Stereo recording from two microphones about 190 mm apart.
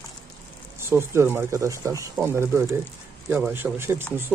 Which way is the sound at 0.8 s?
15° right (ahead or behind).